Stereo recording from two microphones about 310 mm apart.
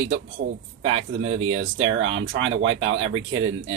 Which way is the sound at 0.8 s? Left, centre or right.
Right.